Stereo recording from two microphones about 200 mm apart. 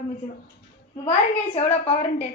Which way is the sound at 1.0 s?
30° left (ahead or behind).